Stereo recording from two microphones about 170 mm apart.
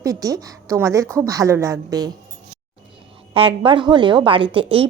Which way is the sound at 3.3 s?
30° right (ahead or behind).